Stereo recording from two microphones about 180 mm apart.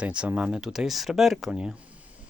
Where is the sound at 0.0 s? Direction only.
5° right (ahead or behind).